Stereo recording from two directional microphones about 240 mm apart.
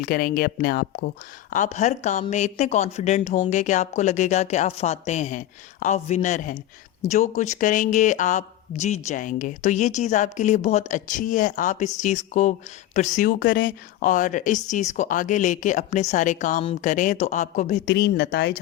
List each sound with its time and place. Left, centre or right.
0.0 s speech: left
17.9 s speech: left